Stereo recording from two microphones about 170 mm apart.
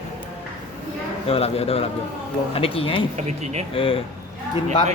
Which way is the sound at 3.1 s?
40° right (ahead or behind).